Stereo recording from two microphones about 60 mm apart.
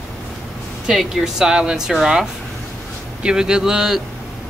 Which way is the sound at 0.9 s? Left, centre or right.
Centre.